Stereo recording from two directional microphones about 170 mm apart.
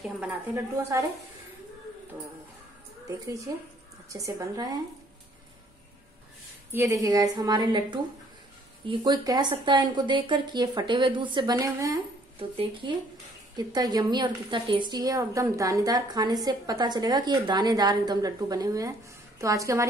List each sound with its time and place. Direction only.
0.0 s a woman's voice: 10° right (ahead or behind)
3.1 s a woman's voice: 20° right (ahead or behind)
6.7 s a woman's voice: 15° right (ahead or behind)
12.4 s a woman's voice: 30° right (ahead or behind)